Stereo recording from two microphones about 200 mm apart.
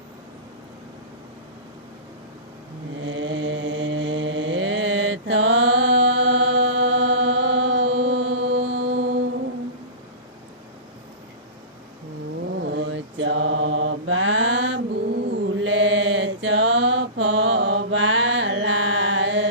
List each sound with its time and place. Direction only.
3.0 s mantra: 70° right (ahead or behind)
12.5 s mantra: 60° right (ahead or behind)